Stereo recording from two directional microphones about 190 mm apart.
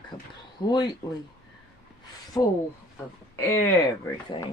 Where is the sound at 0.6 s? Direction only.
20° left (ahead or behind).